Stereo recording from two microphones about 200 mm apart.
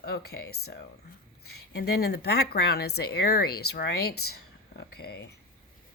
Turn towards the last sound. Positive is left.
turn(degrees=55)  # may be behind; listen again after turning